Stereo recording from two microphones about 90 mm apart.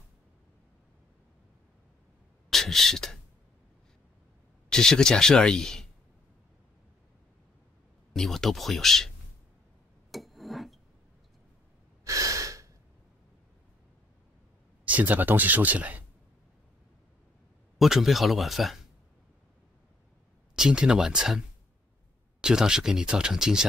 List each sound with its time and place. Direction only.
2.5 s speech: 5° left (ahead or behind)
4.6 s speech: 5° left (ahead or behind)
8.1 s speech: 5° left (ahead or behind)
10.1 s rub: centre (ahead or behind)
12.0 s breathing: 35° right (ahead or behind)
14.9 s speech: 20° right (ahead or behind)
17.7 s speech: 5° right (ahead or behind)
20.5 s speech: 5° right (ahead or behind)
22.4 s speech: 10° right (ahead or behind)